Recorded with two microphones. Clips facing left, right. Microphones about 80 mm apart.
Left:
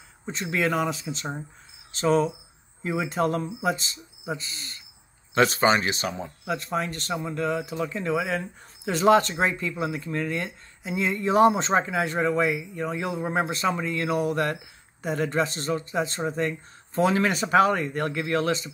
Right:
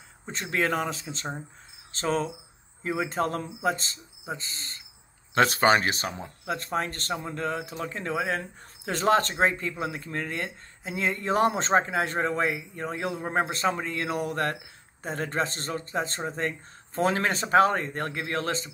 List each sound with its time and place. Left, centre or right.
0.3 s speech: right
2.8 s speech: right
5.3 s speech: right